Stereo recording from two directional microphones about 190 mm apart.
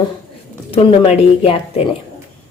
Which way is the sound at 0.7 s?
30° left (ahead or behind).